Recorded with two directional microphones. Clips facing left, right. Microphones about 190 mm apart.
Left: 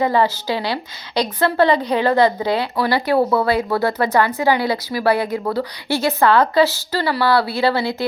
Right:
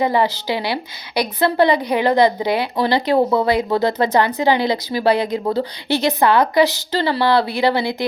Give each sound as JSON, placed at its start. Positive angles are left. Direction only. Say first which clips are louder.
{"t": 0.0, "sound": "a woman's voice", "louder": "even", "side_deg": -15}